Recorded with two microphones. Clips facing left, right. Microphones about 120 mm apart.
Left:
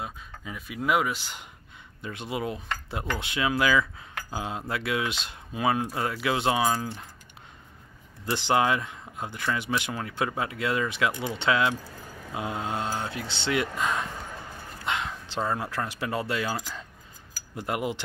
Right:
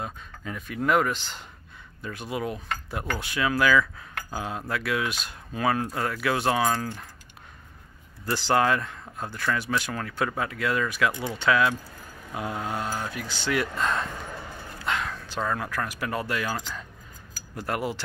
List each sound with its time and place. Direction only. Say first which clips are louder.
0.0 s speech: right 2 dB; 5° left (ahead or behind)
2.0 s speech: right 1 dB; 25° left (ahead or behind)
8.3 s speech: right 1 dB; 20° left (ahead or behind)
13.7 s speech: right 1 dB; 10° left (ahead or behind)